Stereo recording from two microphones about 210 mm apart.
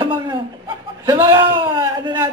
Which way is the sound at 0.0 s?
20° right (ahead or behind).